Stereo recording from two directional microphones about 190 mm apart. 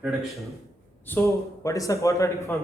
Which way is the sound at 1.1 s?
15° left (ahead or behind).